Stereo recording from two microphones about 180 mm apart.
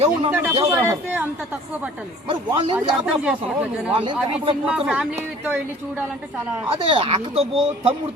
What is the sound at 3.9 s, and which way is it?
Speech, 30° right (ahead or behind).